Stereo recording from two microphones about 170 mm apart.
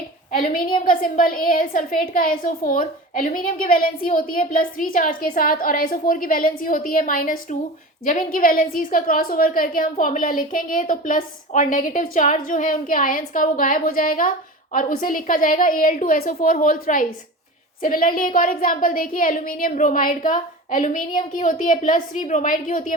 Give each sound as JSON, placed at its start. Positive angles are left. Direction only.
{"t": 0.3, "sound": "a woman's voice", "side_deg": 60}